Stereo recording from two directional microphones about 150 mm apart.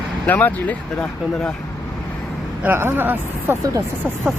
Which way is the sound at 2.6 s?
15° right (ahead or behind).